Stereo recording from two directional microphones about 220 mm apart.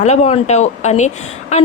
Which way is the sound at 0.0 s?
30° left (ahead or behind).